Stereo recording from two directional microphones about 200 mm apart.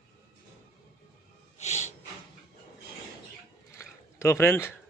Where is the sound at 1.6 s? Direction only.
35° left (ahead or behind).